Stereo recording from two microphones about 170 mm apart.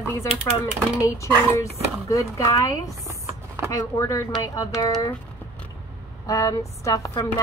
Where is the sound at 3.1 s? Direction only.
15° right (ahead or behind).